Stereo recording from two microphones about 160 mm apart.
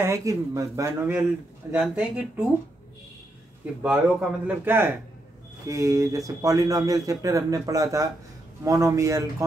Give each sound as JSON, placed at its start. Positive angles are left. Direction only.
{"t": 0.0, "sound": "speech", "side_deg": -20}
{"t": 3.8, "sound": "speech", "side_deg": -5}